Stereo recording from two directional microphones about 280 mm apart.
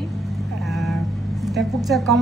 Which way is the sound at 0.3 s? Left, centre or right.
Centre.